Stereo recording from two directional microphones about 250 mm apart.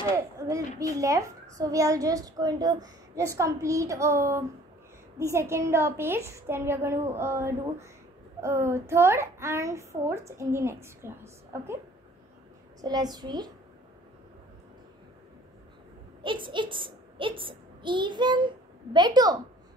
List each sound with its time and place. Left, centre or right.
0.1 s a child's voice: centre
12.8 s a child's voice: centre
16.2 s a woman's voice: centre